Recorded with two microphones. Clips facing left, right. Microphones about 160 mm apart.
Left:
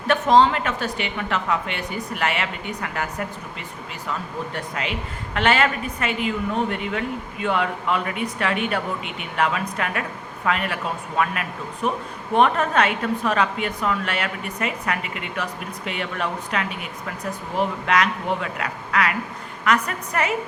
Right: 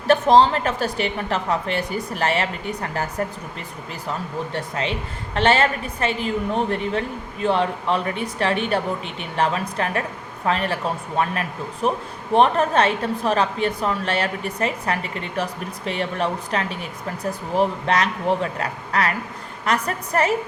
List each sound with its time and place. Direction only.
0.1 s a woman's voice: 35° right (ahead or behind)
4.5 s a woman's voice: 30° right (ahead or behind)